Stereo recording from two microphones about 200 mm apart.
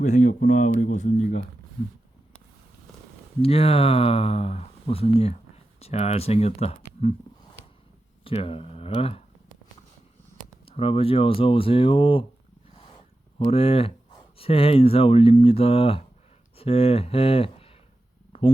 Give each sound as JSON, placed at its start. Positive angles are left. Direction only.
{"t": 0.0, "sound": "speech", "side_deg": 35}
{"t": 3.4, "sound": "speech", "side_deg": 30}
{"t": 8.2, "sound": "speech", "side_deg": 30}
{"t": 10.7, "sound": "speech", "side_deg": 30}
{"t": 13.5, "sound": "speech", "side_deg": 30}
{"t": 18.3, "sound": "a sound", "side_deg": 30}